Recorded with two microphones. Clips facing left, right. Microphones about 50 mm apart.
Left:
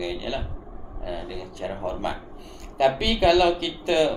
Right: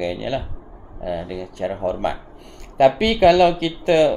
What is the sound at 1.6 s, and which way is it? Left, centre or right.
Speech, right.